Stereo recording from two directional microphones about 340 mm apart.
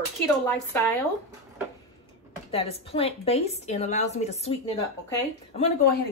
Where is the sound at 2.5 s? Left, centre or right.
Centre.